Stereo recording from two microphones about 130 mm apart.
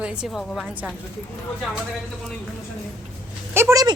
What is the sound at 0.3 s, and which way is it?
Speech, centre (ahead or behind).